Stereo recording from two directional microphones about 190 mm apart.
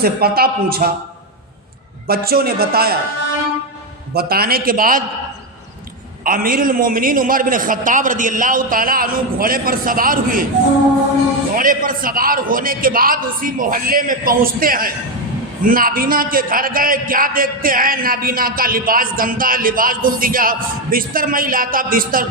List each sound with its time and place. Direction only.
0.0 s a man's voice: 55° right (ahead or behind)
2.0 s a man's voice: 55° right (ahead or behind)
4.1 s a man's voice: 55° right (ahead or behind)
6.2 s a man's voice: 50° right (ahead or behind)
11.5 s a man's voice: 45° right (ahead or behind)